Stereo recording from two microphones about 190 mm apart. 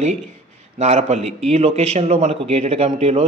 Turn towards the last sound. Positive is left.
turn(degrees=-30)  # may be behind; listen again after turning